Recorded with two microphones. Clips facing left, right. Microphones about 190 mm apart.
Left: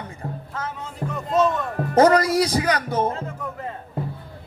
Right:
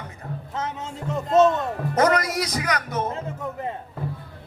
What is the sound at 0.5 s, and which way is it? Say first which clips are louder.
Music: right 3 dB; 20° right (ahead or behind).